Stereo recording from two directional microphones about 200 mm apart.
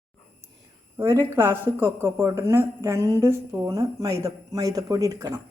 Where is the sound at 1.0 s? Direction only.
10° right (ahead or behind).